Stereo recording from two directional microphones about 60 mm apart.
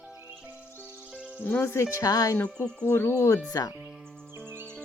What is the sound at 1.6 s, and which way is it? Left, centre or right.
Speech, left.